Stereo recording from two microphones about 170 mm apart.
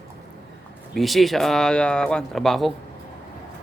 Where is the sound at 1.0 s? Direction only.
Centre (ahead or behind).